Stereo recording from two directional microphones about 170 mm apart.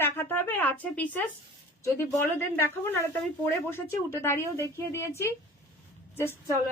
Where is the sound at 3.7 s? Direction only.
15° left (ahead or behind).